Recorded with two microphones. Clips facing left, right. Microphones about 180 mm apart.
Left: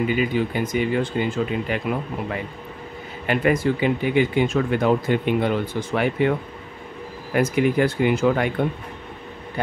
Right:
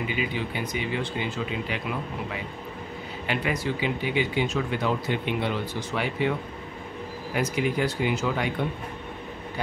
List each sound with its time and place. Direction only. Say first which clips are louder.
0.1 s speech: left 8 dB; 45° left (ahead or behind)
7.3 s speech: left 7 dB; 55° left (ahead or behind)